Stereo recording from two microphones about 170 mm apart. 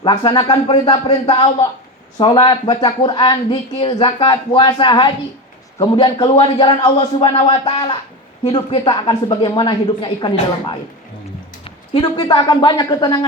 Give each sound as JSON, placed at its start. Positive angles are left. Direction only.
{"t": 0.0, "sound": "speech", "side_deg": 25}